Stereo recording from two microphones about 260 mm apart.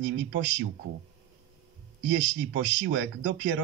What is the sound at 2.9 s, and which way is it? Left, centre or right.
Speech, right.